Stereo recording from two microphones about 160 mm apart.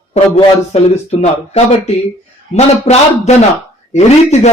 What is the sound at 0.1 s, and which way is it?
A man's voice, 40° left (ahead or behind).